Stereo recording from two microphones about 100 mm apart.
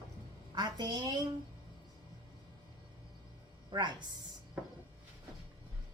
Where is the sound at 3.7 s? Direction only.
45° right (ahead or behind).